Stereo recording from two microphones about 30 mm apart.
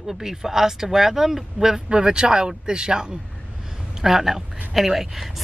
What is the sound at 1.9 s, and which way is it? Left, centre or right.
Speech, right.